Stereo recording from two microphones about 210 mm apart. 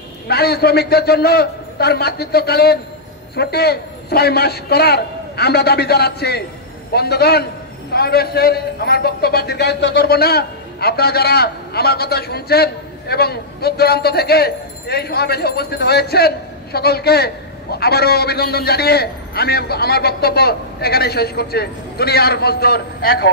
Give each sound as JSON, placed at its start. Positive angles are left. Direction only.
{"t": 0.3, "sound": "a man's voice", "side_deg": 50}